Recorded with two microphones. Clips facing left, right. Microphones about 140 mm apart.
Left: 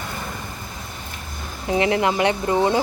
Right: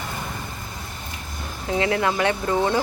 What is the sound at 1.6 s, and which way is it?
Speech, 20° left (ahead or behind).